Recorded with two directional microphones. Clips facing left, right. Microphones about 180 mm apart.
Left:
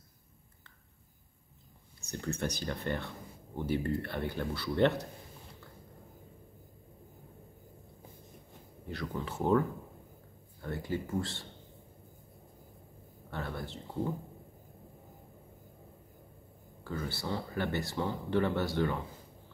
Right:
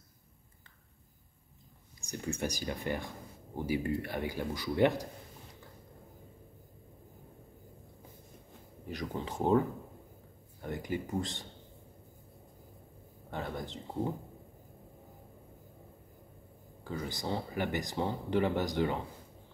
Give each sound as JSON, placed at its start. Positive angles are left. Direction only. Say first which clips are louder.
{"t": 2.0, "sound": "speech", "louder": "even", "side_deg": -15}
{"t": 8.8, "sound": "speech", "louder": "even", "side_deg": -15}
{"t": 10.6, "sound": "speech", "louder": "even", "side_deg": -15}
{"t": 13.3, "sound": "speech", "louder": "right 1 dB", "side_deg": -15}
{"t": 16.8, "sound": "speech", "louder": "even", "side_deg": -15}